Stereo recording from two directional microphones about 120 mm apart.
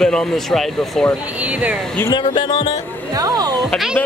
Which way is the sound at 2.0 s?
40° left (ahead or behind).